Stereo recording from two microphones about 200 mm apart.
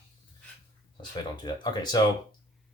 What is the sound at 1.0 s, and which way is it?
Speech, 20° left (ahead or behind).